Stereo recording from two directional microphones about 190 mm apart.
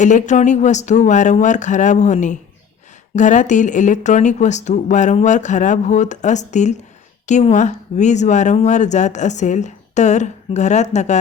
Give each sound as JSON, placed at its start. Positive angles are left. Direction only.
{"t": 0.0, "sound": "speech", "side_deg": 40}